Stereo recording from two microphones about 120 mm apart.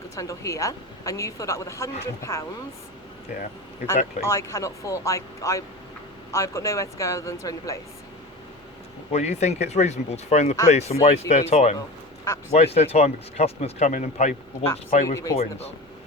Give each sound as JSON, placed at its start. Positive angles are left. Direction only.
{"t": 0.2, "sound": "a woman's voice", "side_deg": 30}
{"t": 3.8, "sound": "a woman's voice", "side_deg": 25}
{"t": 9.1, "sound": "speech", "side_deg": 65}
{"t": 12.2, "sound": "a woman's voice", "side_deg": 25}
{"t": 12.5, "sound": "speech", "side_deg": 60}
{"t": 15.0, "sound": "a woman's voice", "side_deg": 30}
{"t": 15.4, "sound": "speech", "side_deg": 60}